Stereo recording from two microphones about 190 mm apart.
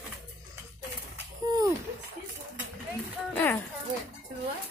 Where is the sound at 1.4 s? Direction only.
20° right (ahead or behind).